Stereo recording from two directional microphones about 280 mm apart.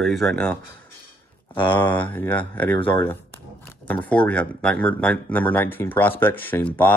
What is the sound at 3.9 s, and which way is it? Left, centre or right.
Speech, centre.